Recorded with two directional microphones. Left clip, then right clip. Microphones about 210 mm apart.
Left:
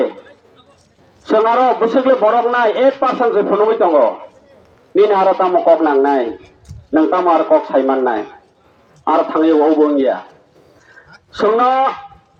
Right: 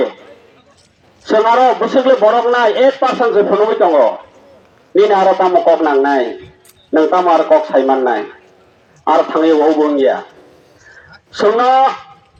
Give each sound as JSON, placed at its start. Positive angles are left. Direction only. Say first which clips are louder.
{"t": 1.2, "sound": "a man's voice", "louder": "right 2 dB", "side_deg": -55}
{"t": 11.3, "sound": "speech", "louder": "right 2 dB", "side_deg": -55}